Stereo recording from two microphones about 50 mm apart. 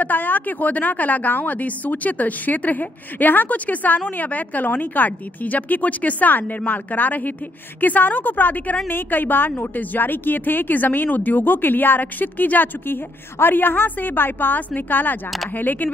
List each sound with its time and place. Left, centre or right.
0.0 s a woman's voice: left